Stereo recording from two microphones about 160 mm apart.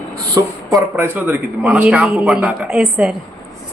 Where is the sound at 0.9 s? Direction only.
15° right (ahead or behind).